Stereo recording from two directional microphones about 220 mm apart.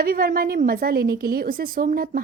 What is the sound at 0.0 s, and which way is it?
A woman's voice, 40° right (ahead or behind).